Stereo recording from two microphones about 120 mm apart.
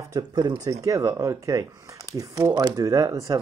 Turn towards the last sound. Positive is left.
turn(degrees=-30)  # may be behind; listen again after turning